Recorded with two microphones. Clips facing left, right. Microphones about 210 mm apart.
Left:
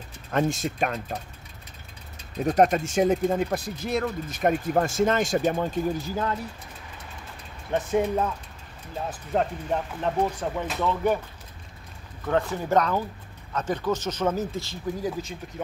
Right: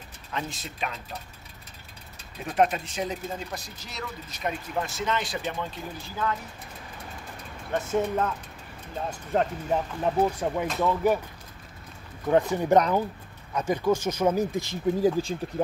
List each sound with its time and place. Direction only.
0.3 s speech: 50° left (ahead or behind)
2.4 s speech: 40° left (ahead or behind)
7.7 s speech: 15° left (ahead or behind)
9.3 s speech: 5° right (ahead or behind)
12.3 s speech: 15° right (ahead or behind)
15.0 s speech: 30° right (ahead or behind)